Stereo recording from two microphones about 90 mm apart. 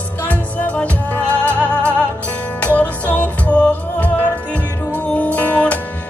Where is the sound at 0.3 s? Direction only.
15° left (ahead or behind).